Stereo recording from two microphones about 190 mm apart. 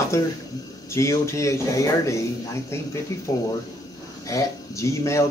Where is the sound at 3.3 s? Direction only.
20° left (ahead or behind).